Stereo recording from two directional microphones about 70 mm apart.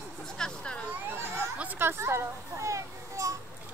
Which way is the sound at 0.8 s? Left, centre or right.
Right.